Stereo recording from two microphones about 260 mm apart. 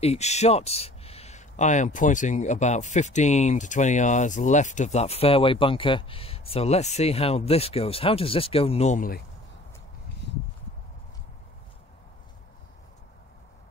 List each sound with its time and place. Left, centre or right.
0.0 s speech: left